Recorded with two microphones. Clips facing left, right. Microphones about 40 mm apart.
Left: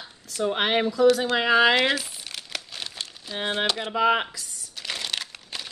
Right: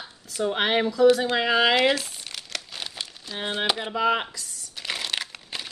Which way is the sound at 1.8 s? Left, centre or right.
Centre.